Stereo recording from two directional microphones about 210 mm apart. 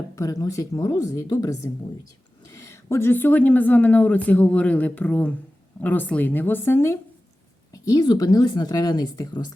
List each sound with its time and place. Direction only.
0.2 s speech: 15° left (ahead or behind)